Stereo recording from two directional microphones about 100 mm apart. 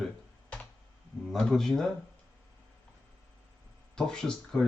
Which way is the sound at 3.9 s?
5° left (ahead or behind).